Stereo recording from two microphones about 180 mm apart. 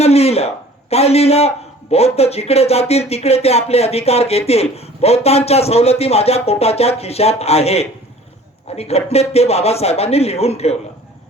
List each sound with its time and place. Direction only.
0.0 s a man's voice: 35° left (ahead or behind)